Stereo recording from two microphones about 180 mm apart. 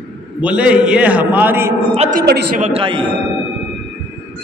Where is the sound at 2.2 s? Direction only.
65° right (ahead or behind).